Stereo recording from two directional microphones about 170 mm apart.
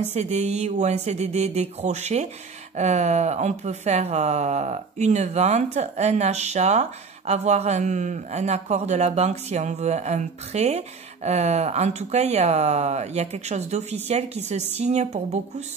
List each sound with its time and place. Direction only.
0.1 s speech: 40° right (ahead or behind)